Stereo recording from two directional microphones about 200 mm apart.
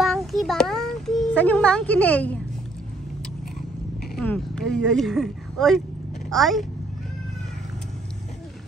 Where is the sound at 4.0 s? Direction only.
5° left (ahead or behind).